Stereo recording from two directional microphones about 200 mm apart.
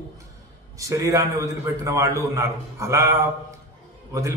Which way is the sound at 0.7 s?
15° right (ahead or behind).